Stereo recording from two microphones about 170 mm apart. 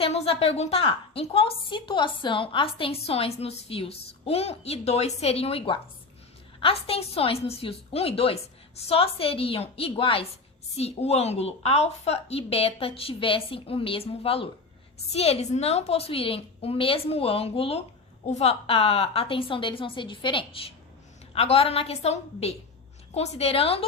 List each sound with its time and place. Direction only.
0.0 s a woman's voice: 35° left (ahead or behind)